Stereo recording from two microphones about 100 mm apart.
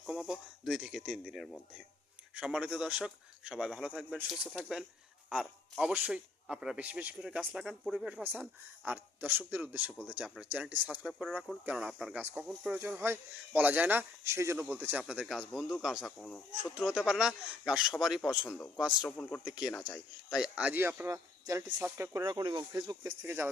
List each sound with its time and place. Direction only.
0.0 s speech: 5° right (ahead or behind)
2.3 s a man's voice: 10° right (ahead or behind)
13.0 s speech: 20° right (ahead or behind)
15.0 s a man's voice: 5° right (ahead or behind)
16.1 s speech: 10° left (ahead or behind)
16.5 s speech: 10° right (ahead or behind)
19.0 s speech: 15° left (ahead or behind)
19.5 s speech: 5° right (ahead or behind)
21.1 s speech: 30° right (ahead or behind)
22.3 s speech: 45° right (ahead or behind)
23.2 s speech: 25° right (ahead or behind)